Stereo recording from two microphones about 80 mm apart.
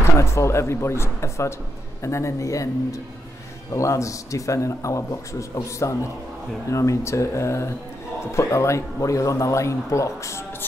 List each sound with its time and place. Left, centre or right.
0.0 s speech: left